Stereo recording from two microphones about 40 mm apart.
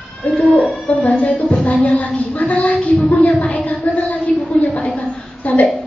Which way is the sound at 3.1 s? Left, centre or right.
Left.